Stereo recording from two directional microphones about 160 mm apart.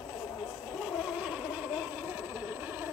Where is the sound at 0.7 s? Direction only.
Centre (ahead or behind).